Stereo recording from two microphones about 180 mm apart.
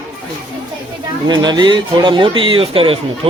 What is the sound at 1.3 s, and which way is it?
A man's voice, 25° right (ahead or behind).